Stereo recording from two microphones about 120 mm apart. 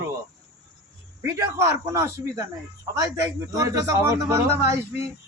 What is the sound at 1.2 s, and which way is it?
Speech, 25° right (ahead or behind).